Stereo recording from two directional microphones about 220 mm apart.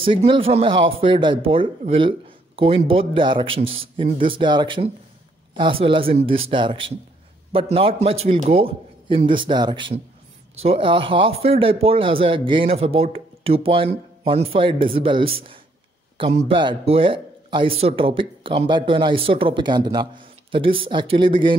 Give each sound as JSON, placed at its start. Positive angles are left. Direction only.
{"t": 0.0, "sound": "speech", "side_deg": -25}